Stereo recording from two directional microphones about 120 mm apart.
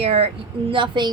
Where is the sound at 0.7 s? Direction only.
40° right (ahead or behind).